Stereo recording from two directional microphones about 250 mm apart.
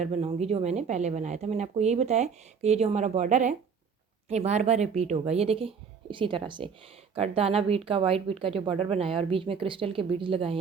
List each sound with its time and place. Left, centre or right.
0.0 s speech: right